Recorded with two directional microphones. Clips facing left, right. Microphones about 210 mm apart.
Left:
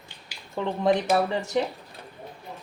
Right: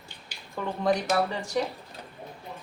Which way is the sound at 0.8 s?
25° left (ahead or behind).